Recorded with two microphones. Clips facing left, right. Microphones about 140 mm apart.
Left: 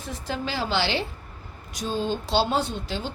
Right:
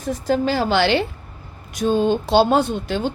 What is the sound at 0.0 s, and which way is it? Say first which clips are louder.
A woman's voice: right 11 dB; 45° right (ahead or behind).